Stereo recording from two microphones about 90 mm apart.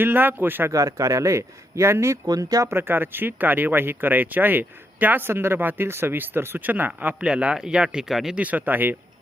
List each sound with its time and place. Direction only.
0.0 s speech: 20° right (ahead or behind)
0.7 s speech: 35° right (ahead or behind)
2.2 s speech: 45° right (ahead or behind)
2.7 s speech: 25° right (ahead or behind); by 8.4 s 5° right (ahead or behind)
8.4 s speech: 15° right (ahead or behind)